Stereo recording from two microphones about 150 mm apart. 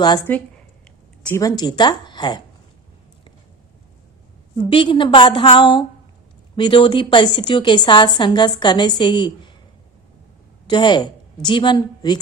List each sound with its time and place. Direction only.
0.0 s speech: 30° left (ahead or behind)
1.4 s speech: 25° left (ahead or behind)
4.5 s a woman's voice: 35° left (ahead or behind)
10.7 s a woman's voice: 30° left (ahead or behind)